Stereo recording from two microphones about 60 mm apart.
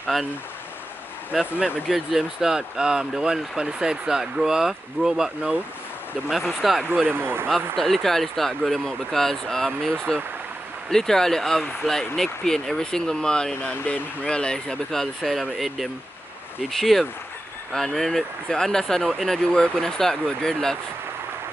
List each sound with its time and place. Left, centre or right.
0.1 s speech: centre
1.3 s speech: centre
7.1 s speech: right
7.7 s speech: centre